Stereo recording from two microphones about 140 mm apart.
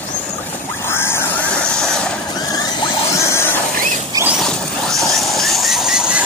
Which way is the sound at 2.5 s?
25° left (ahead or behind).